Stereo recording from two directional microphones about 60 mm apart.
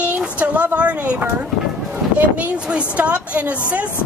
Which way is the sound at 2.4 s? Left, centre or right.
Right.